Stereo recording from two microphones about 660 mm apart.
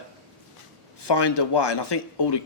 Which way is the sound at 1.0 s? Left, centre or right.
Left.